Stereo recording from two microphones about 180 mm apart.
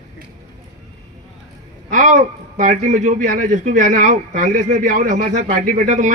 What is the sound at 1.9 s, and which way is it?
A man's voice, 45° right (ahead or behind).